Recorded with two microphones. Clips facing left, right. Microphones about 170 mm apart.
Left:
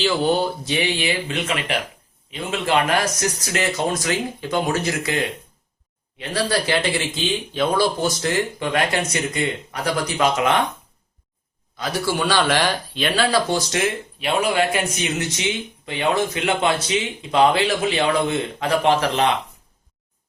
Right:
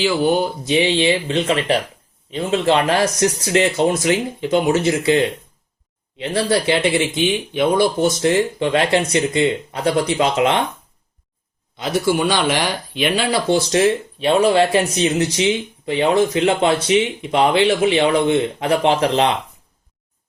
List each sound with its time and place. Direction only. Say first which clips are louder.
0.0 s speech: right 2 dB; 10° right (ahead or behind)
11.8 s speech: right 5 dB; 20° right (ahead or behind)